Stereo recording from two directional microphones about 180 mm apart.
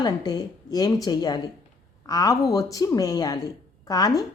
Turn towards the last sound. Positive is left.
turn(degrees=20)  # may be behind; listen again after turning